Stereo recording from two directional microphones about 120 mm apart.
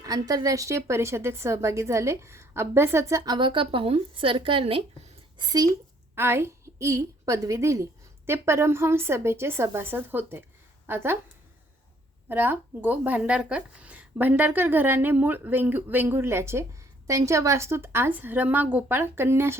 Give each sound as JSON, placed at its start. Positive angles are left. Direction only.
{"t": 0.0, "sound": "a woman's voice", "side_deg": -30}
{"t": 3.3, "sound": "speech", "side_deg": -40}
{"t": 6.1, "sound": "a woman's voice", "side_deg": -20}
{"t": 12.3, "sound": "a woman's voice", "side_deg": -15}